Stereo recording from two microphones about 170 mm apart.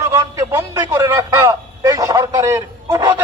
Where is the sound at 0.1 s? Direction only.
15° right (ahead or behind).